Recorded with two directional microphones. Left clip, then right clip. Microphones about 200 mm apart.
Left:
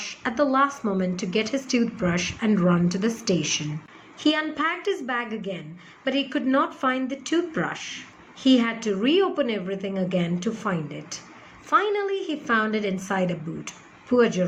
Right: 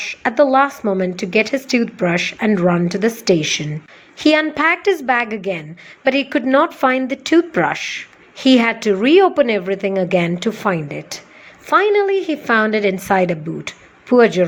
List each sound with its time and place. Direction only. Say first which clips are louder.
0.0 s a woman's voice: right 10 dB; 35° right (ahead or behind)